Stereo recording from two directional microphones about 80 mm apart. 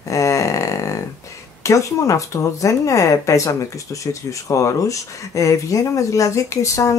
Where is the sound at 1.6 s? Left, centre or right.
Left.